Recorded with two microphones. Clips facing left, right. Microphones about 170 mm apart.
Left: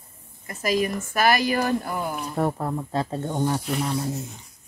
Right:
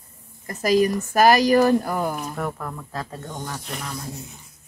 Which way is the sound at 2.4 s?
30° left (ahead or behind).